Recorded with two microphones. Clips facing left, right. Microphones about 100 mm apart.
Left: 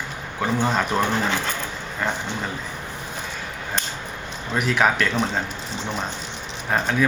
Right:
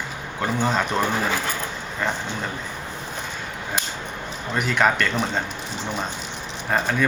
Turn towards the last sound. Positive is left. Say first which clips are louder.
# even
turn(degrees=0)  # may be behind; listen again after turning